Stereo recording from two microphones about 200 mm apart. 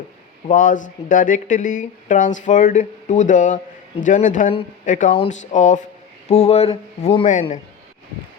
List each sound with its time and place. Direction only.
0.4 s speech: 40° left (ahead or behind)